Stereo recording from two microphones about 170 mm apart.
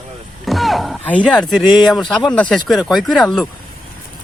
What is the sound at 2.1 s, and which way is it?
Speech, 5° left (ahead or behind).